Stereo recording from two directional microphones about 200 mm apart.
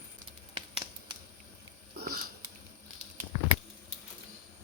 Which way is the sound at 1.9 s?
50° right (ahead or behind).